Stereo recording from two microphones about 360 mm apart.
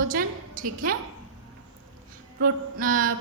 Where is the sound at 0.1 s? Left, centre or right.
Right.